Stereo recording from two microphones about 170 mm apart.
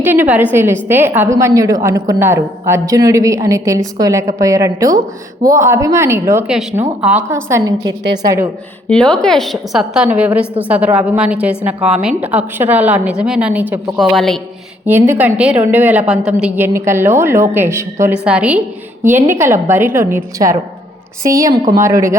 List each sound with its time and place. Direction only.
0.0 s a woman's voice: 10° right (ahead or behind)
6.5 s a woman's voice: 5° right (ahead or behind); by 8.4 s 20° right (ahead or behind)
8.9 s a woman's voice: 5° left (ahead or behind); by 22.2 s 15° right (ahead or behind)